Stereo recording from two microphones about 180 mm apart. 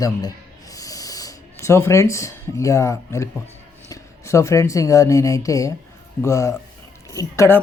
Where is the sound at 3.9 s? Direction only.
15° left (ahead or behind).